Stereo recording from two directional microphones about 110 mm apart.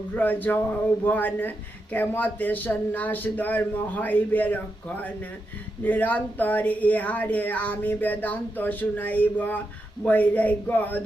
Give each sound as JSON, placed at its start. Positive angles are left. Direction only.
{"t": 0.2, "sound": "speech", "side_deg": 15}